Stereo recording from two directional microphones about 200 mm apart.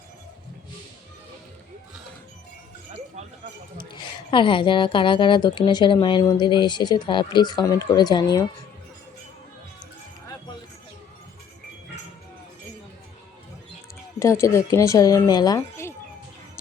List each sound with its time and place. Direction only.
3.8 s a woman's voice: 25° left (ahead or behind)
14.2 s speech: 15° left (ahead or behind)